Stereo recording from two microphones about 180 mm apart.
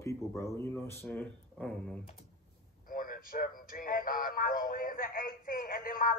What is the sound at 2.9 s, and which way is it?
Speech, 50° left (ahead or behind).